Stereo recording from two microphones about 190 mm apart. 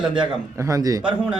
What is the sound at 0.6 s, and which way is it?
Speech, 15° right (ahead or behind).